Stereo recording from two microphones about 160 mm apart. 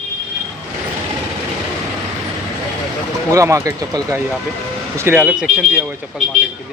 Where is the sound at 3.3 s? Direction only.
20° right (ahead or behind).